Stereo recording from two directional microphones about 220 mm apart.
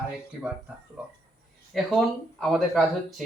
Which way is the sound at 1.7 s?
Centre (ahead or behind).